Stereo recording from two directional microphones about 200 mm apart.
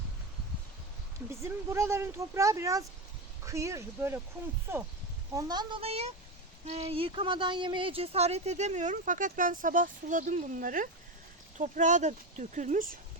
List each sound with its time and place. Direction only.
1.3 s speech: 15° right (ahead or behind)
5.3 s a child's voice: 20° right (ahead or behind); by 13.0 s 40° right (ahead or behind)